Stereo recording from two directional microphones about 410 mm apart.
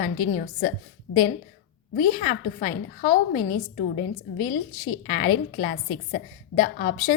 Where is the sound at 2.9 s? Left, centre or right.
Left.